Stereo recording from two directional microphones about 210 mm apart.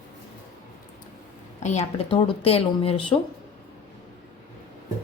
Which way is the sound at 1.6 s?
35° left (ahead or behind).